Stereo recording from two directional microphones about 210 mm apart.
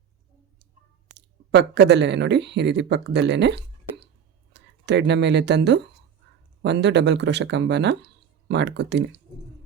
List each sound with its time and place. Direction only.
1.1 s speech: 55° right (ahead or behind)